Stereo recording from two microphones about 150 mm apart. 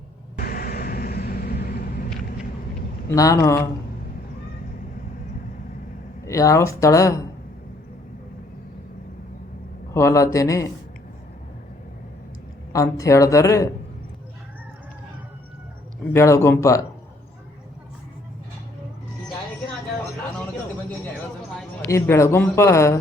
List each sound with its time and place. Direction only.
0.3 s vehicle: 85° left
3.1 s speech: 20° left (ahead or behind)
6.2 s speech: 20° left (ahead or behind)
9.9 s speech: 20° left (ahead or behind)
12.7 s speech: 20° left (ahead or behind)
16.1 s speech: 20° left (ahead or behind)
21.8 s speech: 20° left (ahead or behind)